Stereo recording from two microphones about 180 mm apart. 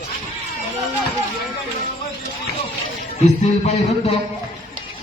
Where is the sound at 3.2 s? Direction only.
40° left (ahead or behind).